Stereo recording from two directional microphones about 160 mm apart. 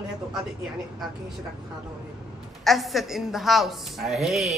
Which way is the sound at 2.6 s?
Centre (ahead or behind).